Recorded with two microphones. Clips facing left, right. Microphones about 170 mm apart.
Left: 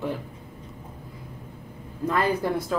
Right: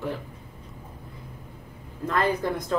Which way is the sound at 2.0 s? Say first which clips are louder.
Left 1 dB; 10° left (ahead or behind).